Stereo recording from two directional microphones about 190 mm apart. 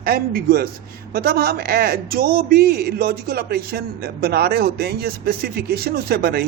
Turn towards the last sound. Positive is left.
turn(degrees=-55)  # may be behind; listen again after turning